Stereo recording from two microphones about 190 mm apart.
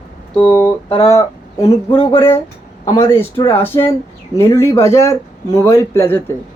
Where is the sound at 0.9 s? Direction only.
30° left (ahead or behind).